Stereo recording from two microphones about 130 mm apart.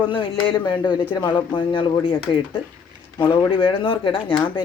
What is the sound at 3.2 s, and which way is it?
Speech, 40° left (ahead or behind).